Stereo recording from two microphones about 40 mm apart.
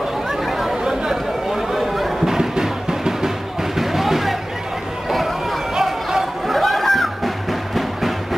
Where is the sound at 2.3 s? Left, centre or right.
Centre.